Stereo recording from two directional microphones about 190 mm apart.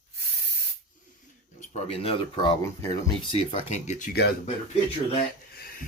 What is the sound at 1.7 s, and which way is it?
Speech, 30° left (ahead or behind).